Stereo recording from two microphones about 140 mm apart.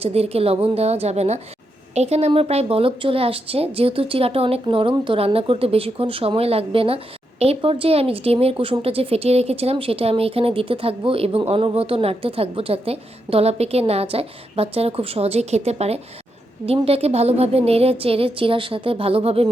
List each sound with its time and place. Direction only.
0.0 s a woman's voice: 45° right (ahead or behind)